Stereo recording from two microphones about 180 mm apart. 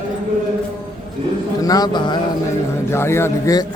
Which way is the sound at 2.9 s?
15° left (ahead or behind).